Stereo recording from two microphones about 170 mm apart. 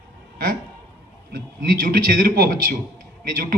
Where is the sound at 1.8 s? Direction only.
60° right (ahead or behind).